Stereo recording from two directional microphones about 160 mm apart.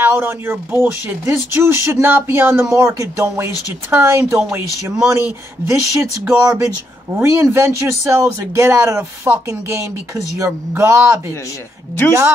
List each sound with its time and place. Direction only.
0.0 s speech: 15° right (ahead or behind)